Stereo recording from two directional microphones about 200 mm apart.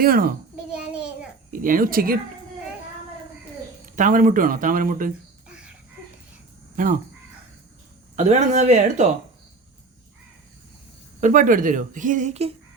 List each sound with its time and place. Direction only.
0.0 s speech: 45° right (ahead or behind)
1.5 s speech: 45° right (ahead or behind)
3.8 s speech: 40° right (ahead or behind)
6.8 s speech: 40° right (ahead or behind)
8.1 s a woman's voice: 35° right (ahead or behind)
11.2 s a woman's voice: 40° right (ahead or behind)